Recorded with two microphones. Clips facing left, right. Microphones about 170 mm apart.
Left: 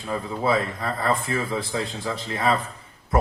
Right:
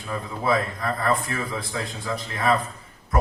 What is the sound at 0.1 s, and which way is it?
A man's voice, 30° left (ahead or behind).